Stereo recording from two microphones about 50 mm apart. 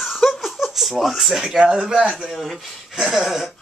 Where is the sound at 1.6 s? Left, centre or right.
Centre.